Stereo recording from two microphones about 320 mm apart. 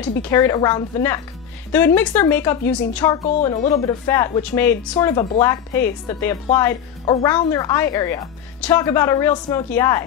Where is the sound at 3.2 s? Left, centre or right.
Centre.